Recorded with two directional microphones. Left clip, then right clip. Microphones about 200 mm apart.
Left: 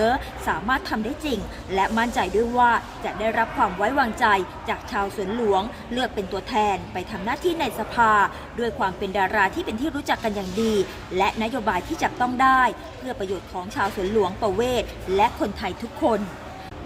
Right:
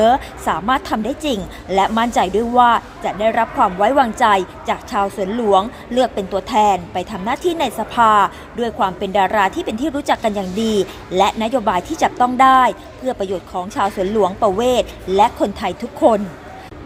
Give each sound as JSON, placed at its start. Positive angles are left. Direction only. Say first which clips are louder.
{"t": 0.0, "sound": "a woman's voice", "louder": "right 8 dB", "side_deg": -30}